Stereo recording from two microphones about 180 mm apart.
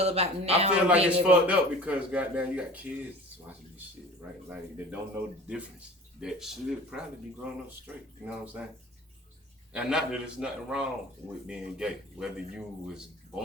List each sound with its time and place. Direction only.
0.0 s a man's voice: 35° right (ahead or behind)
0.7 s a man's voice: 5° right (ahead or behind)
4.4 s a man's voice: 10° right (ahead or behind)
8.2 s a man's voice: 5° right (ahead or behind)
9.7 s a man's voice: 5° right (ahead or behind)